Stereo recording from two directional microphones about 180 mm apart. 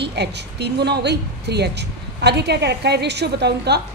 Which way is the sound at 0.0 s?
70° right (ahead or behind).